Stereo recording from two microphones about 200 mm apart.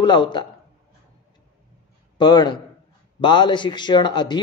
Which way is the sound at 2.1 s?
20° left (ahead or behind).